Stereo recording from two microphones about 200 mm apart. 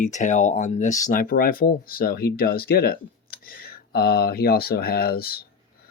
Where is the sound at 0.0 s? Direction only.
40° left (ahead or behind).